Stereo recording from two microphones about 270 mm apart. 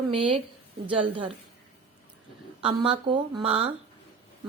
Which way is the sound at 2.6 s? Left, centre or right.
Centre.